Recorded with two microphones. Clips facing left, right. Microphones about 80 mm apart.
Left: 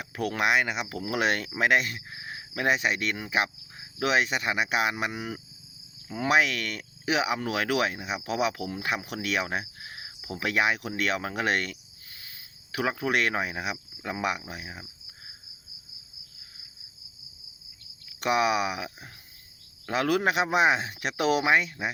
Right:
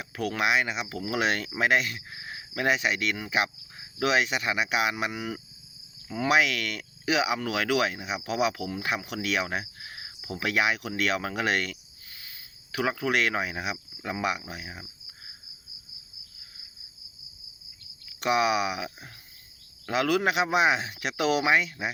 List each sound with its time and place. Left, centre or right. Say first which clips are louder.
0.0 s speech: left 1 dB; left
3.2 s cricket: even; left
4.0 s speech: even; left
18.2 s speech: even; left
19.9 s speech: even; left